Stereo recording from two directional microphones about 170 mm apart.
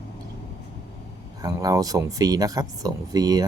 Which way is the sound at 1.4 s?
20° right (ahead or behind).